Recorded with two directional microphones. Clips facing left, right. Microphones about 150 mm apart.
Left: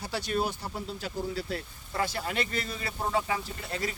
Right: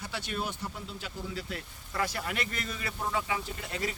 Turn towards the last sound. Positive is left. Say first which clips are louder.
# left 1 dB
turn(degrees=35)  # may be behind; listen again after turning